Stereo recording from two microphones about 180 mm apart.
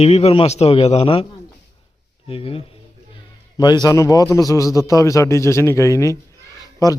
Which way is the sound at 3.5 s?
25° left (ahead or behind).